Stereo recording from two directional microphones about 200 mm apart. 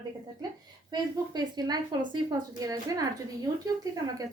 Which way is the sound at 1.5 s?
20° right (ahead or behind).